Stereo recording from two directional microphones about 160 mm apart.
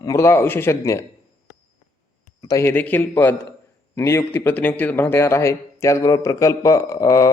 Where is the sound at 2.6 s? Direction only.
10° left (ahead or behind).